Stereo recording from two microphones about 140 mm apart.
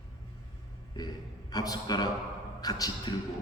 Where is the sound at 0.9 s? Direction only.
30° left (ahead or behind).